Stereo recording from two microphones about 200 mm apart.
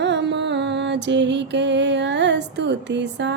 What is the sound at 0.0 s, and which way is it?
Music, 60° right (ahead or behind).